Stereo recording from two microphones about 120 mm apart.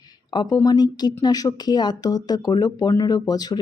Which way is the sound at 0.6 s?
35° left (ahead or behind).